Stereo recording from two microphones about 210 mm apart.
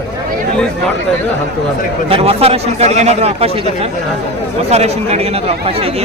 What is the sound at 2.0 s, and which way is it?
A man's voice, 30° right (ahead or behind).